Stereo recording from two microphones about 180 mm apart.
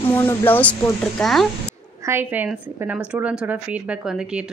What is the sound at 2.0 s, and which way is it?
Speech, 10° right (ahead or behind).